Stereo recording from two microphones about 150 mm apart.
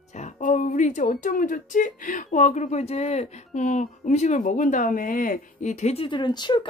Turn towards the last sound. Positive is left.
turn(degrees=30)  # may be behind; listen again after turning